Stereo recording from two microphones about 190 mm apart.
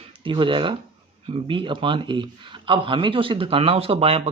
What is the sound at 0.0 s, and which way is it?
Speech, 25° right (ahead or behind).